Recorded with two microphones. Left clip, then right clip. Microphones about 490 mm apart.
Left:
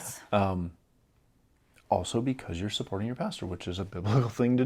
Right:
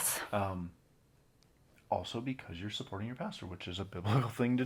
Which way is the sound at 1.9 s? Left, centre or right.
Left.